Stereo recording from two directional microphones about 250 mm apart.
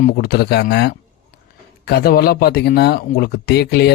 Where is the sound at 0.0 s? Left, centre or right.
Left.